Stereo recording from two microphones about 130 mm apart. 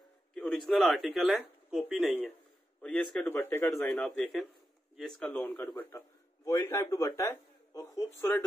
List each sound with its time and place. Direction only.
0.3 s a man's voice: 5° left (ahead or behind)
5.8 s speech: 20° left (ahead or behind)